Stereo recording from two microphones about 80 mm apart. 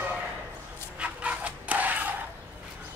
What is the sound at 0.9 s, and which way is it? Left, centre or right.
Dog, centre.